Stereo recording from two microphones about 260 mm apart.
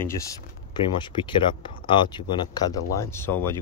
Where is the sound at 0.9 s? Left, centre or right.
Centre.